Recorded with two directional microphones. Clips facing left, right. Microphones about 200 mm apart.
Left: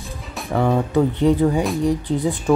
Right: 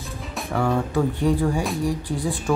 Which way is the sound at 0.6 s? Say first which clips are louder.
Left 4 dB; 20° left (ahead or behind).